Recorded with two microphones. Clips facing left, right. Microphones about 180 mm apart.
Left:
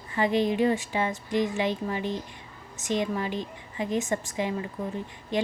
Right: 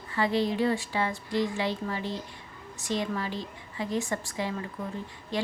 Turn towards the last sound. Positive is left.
turn(degrees=20)  # may be behind; listen again after turning